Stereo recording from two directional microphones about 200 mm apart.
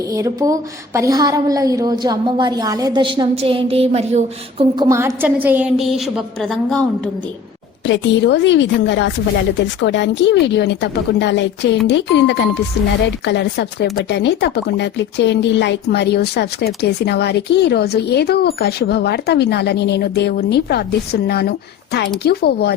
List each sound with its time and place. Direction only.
0.1 s a woman's voice: 15° right (ahead or behind)
4.8 s a woman's voice: 15° right (ahead or behind); by 7.1 s 5° left (ahead or behind)
7.9 s speech: 65° left (ahead or behind)